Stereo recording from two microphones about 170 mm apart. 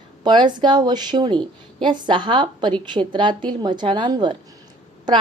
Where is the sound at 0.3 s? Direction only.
25° right (ahead or behind).